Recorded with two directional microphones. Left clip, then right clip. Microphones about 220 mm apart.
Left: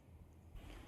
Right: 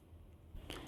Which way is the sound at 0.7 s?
45° right (ahead or behind).